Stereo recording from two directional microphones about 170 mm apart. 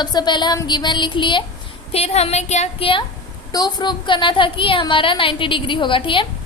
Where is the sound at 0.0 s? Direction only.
25° left (ahead or behind).